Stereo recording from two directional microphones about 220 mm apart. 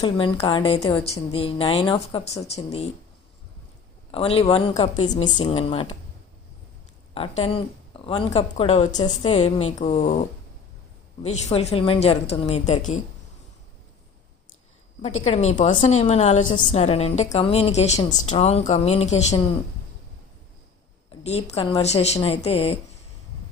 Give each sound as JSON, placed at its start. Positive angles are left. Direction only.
{"t": 0.0, "sound": "speech", "side_deg": 20}
{"t": 4.1, "sound": "speech", "side_deg": 25}
{"t": 7.1, "sound": "a woman's voice", "side_deg": 25}
{"t": 15.2, "sound": "speech", "side_deg": 30}
{"t": 21.1, "sound": "speech", "side_deg": 30}